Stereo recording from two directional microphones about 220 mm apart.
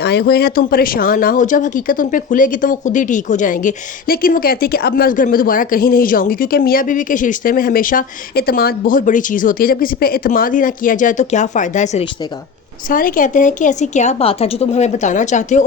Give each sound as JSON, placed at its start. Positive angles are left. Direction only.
{"t": 0.0, "sound": "speech", "side_deg": 45}